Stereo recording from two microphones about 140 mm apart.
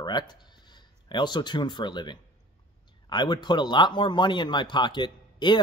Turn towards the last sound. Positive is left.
turn(degrees=35)  # may be behind; listen again after turning